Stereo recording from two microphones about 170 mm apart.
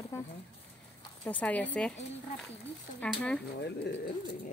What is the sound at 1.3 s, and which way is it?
Speech, 10° left (ahead or behind).